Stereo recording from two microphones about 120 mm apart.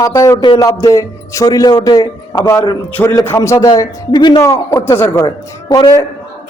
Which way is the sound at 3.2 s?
25° left (ahead or behind).